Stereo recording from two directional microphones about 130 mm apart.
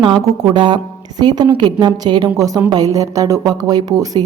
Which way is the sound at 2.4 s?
25° right (ahead or behind).